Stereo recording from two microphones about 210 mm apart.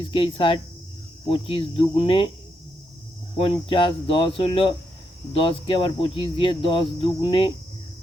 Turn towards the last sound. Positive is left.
turn(degrees=25)  # may be behind; listen again after turning